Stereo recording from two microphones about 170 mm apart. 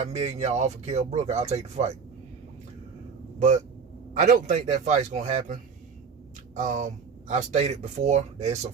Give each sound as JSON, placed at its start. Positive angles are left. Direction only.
{"t": 0.0, "sound": "speech", "side_deg": -40}
{"t": 4.1, "sound": "speech", "side_deg": -45}
{"t": 6.6, "sound": "speech", "side_deg": -45}